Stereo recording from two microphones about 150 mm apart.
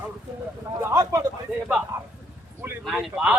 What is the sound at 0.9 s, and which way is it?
Speech, 20° right (ahead or behind).